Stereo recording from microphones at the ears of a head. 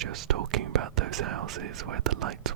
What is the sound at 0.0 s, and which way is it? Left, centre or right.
Whispering, right.